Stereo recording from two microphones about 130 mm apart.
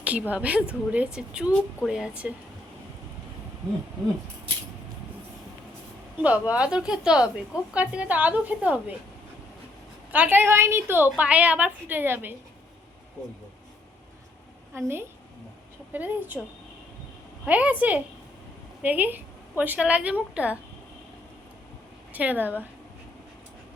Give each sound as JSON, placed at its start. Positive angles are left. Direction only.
{"t": 0.0, "sound": "a woman's voice", "side_deg": -10}
{"t": 6.2, "sound": "a woman's voice", "side_deg": -10}
{"t": 10.1, "sound": "a woman's voice", "side_deg": -15}
{"t": 14.8, "sound": "a woman's voice", "side_deg": -20}
{"t": 17.4, "sound": "a woman's voice", "side_deg": -10}
{"t": 22.1, "sound": "a woman's voice", "side_deg": -10}